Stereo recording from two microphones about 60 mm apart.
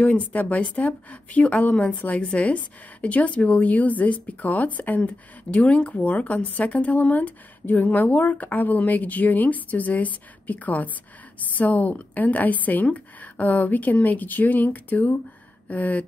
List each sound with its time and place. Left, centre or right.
0.0 s a woman's voice: left